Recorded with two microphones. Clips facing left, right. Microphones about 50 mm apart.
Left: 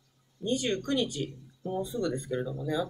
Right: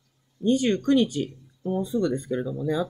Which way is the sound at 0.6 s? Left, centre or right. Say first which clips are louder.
Right 8 dB; right.